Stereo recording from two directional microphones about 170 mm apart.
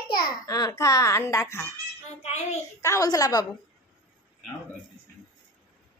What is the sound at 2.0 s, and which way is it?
Speech, 40° left (ahead or behind).